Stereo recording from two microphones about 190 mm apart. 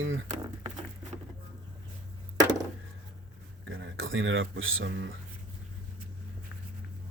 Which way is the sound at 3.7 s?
85° right.